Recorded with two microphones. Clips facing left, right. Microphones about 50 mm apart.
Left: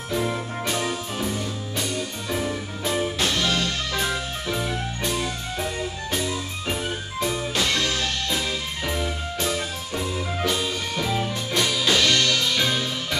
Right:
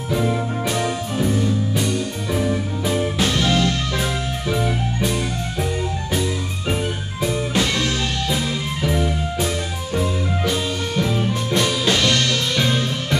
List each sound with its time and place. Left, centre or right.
0.1 s music: centre
6.7 s music: centre
11.5 s music: right